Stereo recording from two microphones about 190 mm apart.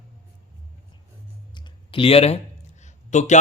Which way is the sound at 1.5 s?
25° left (ahead or behind).